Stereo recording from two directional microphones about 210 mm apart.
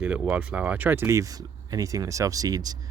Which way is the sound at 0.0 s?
5° right (ahead or behind).